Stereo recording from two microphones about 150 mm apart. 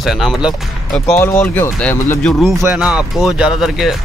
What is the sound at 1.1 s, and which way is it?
Speech, 20° left (ahead or behind).